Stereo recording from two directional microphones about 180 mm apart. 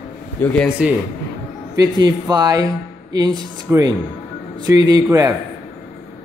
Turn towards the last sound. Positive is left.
turn(degrees=-20)  # may be behind; listen again after turning